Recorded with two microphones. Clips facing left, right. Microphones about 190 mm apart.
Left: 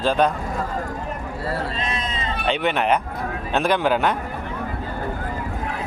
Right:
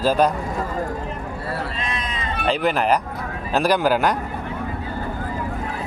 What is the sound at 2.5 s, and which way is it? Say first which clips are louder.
Speech: right 1 dB; centre (ahead or behind).